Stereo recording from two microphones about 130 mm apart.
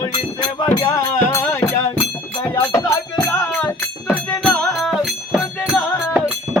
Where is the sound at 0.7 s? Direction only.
30° left (ahead or behind).